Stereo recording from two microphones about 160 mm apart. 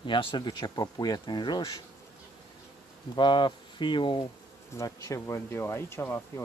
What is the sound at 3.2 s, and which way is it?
Speech, 30° left (ahead or behind).